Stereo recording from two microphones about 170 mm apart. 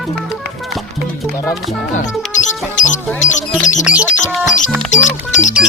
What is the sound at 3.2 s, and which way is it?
Speech, 45° left (ahead or behind).